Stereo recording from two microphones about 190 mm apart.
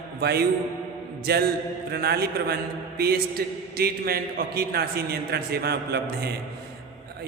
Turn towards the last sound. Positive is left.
turn(degrees=-60)  # may be behind; listen again after turning